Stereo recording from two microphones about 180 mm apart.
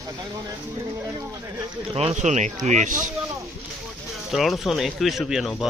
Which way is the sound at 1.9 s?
35° right (ahead or behind).